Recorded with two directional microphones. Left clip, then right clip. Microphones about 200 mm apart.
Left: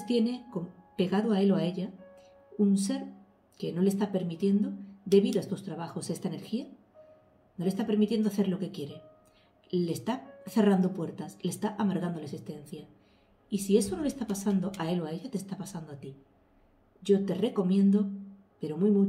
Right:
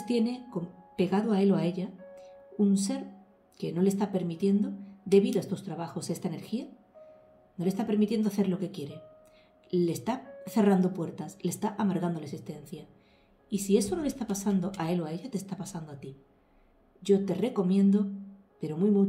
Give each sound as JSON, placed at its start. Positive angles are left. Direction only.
{"t": 0.0, "sound": "a woman's voice", "side_deg": -35}